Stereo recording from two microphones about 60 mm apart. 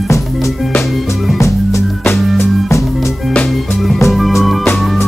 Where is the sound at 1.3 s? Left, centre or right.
Left.